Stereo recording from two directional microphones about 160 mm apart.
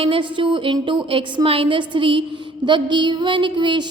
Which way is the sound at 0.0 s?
30° right (ahead or behind).